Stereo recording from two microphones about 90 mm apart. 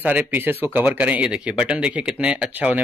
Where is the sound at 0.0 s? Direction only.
20° right (ahead or behind).